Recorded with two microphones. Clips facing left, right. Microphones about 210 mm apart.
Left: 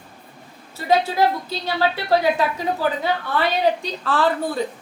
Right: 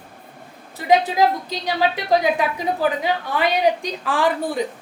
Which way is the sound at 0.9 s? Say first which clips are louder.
Right 2 dB; 15° right (ahead or behind).